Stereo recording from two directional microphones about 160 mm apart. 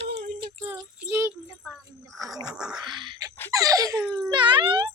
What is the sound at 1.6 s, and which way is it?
Speech, centre (ahead or behind).